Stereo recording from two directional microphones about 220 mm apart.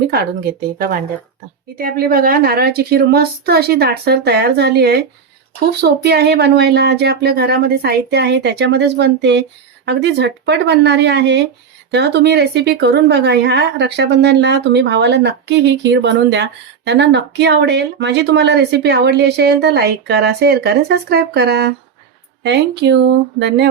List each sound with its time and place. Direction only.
1.8 s a woman's voice: 40° right (ahead or behind)